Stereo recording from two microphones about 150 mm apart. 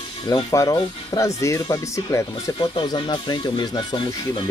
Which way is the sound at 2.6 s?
35° left (ahead or behind).